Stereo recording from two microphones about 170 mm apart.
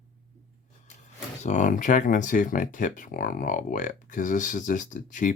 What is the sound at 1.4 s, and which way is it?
Speech, 45° left (ahead or behind).